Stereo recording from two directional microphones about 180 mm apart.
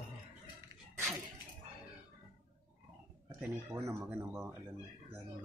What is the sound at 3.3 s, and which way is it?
Speech, 15° right (ahead or behind).